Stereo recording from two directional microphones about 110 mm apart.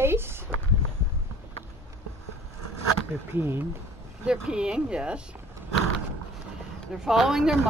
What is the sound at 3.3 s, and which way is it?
Speech, 20° right (ahead or behind).